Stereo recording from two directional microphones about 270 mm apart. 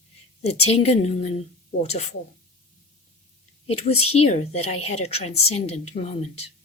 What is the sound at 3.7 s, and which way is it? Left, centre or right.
A woman's voice, left.